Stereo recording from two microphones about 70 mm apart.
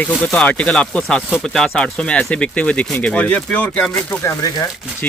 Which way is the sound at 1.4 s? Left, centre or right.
Centre.